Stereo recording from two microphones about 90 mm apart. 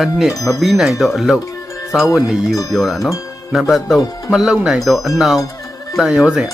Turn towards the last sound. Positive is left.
turn(degrees=-5)  # may be behind; listen again after turning